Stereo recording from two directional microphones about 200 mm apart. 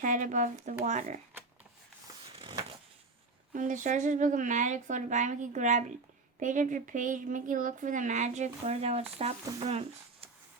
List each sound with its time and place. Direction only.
0.0 s speech: 40° right (ahead or behind)
2.3 s a sound: 25° right (ahead or behind)
3.5 s speech: 40° right (ahead or behind)